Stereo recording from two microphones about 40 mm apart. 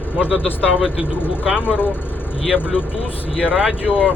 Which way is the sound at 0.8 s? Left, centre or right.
Right.